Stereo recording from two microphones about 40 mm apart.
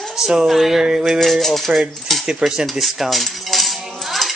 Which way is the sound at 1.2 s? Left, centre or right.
Centre.